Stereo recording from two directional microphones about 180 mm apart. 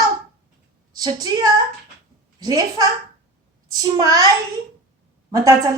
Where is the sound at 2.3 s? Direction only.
20° right (ahead or behind).